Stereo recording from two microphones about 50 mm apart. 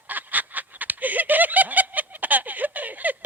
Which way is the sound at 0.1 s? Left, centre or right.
Right.